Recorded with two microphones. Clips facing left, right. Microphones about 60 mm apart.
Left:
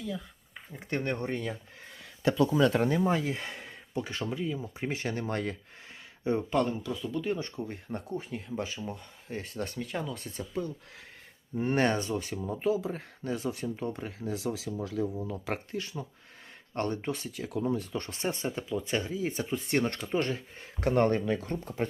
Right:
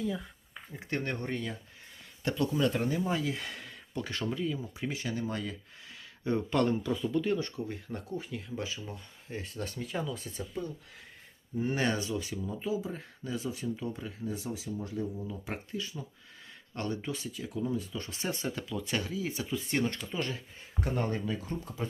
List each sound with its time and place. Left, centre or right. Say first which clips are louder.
0.7 s speech: left 2 dB; centre
1.3 s speech: left 2 dB; left
2.9 s speech: left 4 dB; left; by 4.6 s centre
4.6 s speech: left 2 dB; left
6.5 s speech: right 1 dB; centre
7.3 s speech: right 1 dB; left
9.4 s speech: left 3 dB; left
14.3 s speech: left 4 dB; left
16.7 s speech: left 4 dB; left
18.2 s speech: left 1 dB; left
20.8 s speech: left 7 dB; left